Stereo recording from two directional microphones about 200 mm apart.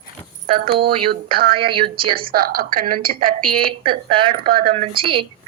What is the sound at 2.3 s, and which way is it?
Speech, 45° right (ahead or behind).